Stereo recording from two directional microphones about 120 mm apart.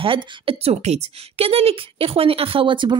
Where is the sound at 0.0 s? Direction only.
50° right (ahead or behind).